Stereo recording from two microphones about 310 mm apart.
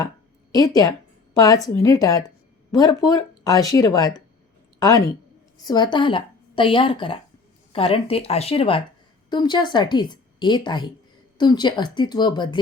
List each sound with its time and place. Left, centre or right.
0.5 s a woman's voice: centre